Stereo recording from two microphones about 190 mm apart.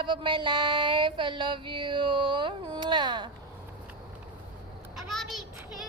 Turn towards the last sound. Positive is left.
turn(degrees=0)  # may be behind; listen again after turning